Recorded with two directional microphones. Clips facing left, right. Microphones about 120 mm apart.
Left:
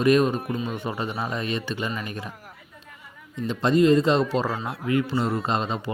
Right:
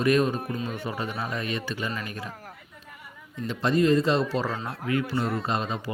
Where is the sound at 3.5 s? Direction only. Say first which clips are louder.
Left 3 dB; 20° left (ahead or behind).